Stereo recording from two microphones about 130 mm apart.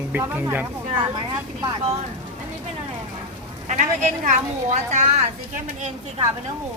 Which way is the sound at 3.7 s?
65° right (ahead or behind).